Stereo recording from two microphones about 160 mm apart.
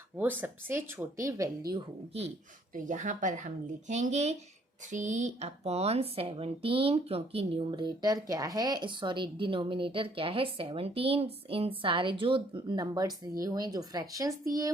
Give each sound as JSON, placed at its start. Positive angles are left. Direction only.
{"t": 0.2, "sound": "speech", "side_deg": -10}
{"t": 2.7, "sound": "speech", "side_deg": -55}